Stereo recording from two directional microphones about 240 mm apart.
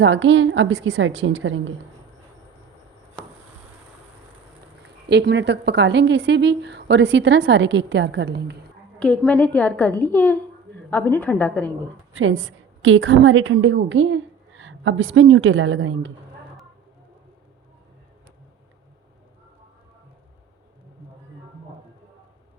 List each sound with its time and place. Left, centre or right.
0.0 s a woman's voice: right
5.0 s a woman's voice: right
9.0 s a woman's voice: centre
12.1 s a woman's voice: right